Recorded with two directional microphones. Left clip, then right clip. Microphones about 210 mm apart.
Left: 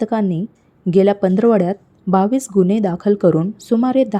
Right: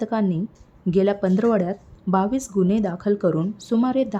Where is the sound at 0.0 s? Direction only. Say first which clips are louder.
Left 5 dB; 20° left (ahead or behind).